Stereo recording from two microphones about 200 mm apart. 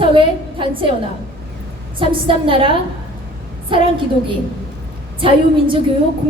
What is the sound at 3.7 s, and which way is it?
Speech, 25° right (ahead or behind).